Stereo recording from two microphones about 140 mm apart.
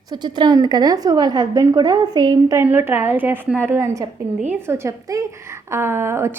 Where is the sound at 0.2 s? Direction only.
30° right (ahead or behind).